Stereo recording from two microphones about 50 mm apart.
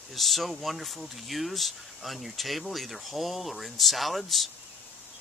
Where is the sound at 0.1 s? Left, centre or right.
Centre.